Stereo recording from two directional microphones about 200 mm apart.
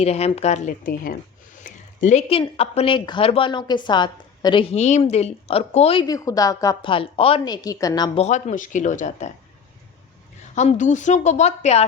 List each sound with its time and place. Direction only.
0.0 s a woman's voice: 30° left (ahead or behind)
8.2 s a woman's voice: 35° left (ahead or behind)
10.5 s a woman's voice: 35° left (ahead or behind)